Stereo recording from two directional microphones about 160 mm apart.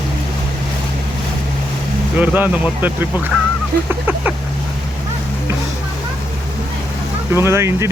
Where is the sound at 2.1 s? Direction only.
10° right (ahead or behind).